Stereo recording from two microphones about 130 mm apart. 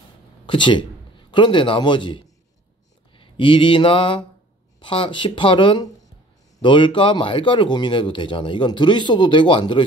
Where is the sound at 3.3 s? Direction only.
40° left (ahead or behind).